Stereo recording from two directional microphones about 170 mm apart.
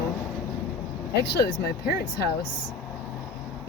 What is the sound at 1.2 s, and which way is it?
Speech, 70° left (ahead or behind).